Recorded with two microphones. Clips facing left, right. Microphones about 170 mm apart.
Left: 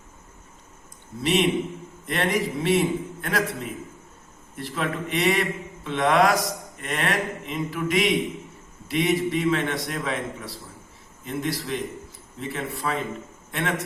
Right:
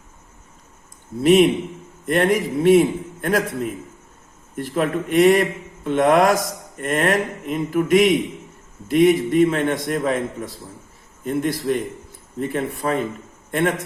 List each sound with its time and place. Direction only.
1.2 s a man's voice: 50° right (ahead or behind)